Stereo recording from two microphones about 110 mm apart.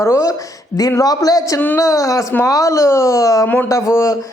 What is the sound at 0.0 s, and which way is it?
A man's voice, 25° left (ahead or behind).